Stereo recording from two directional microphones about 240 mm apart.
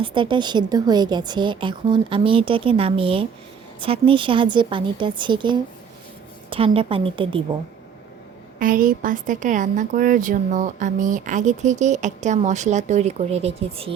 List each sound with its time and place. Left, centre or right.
0.0 s a woman's voice: right
8.5 s a woman's voice: right